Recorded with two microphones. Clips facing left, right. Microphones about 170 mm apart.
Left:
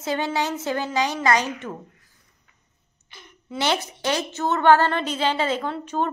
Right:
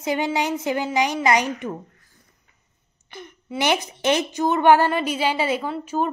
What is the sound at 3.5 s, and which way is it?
A woman's voice, 15° right (ahead or behind).